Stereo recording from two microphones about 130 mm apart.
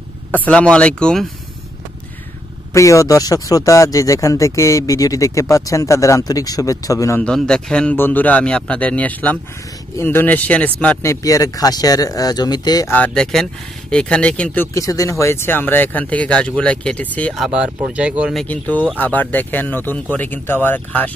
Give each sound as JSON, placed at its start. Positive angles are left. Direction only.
{"t": 0.3, "sound": "speech", "side_deg": 10}
{"t": 2.7, "sound": "speech", "side_deg": 25}
{"t": 7.2, "sound": "speech", "side_deg": 5}
{"t": 12.8, "sound": "speech", "side_deg": 15}
{"t": 17.3, "sound": "speech", "side_deg": -5}
{"t": 18.3, "sound": "speech", "side_deg": 10}